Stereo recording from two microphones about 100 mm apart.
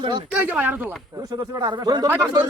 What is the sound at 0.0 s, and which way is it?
Speech, 50° right (ahead or behind).